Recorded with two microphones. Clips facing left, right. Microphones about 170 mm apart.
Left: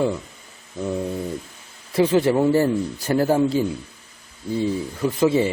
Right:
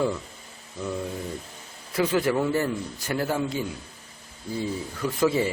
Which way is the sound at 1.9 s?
25° left (ahead or behind).